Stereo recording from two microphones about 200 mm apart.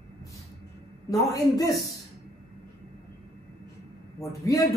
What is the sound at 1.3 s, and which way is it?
Speech, 15° left (ahead or behind).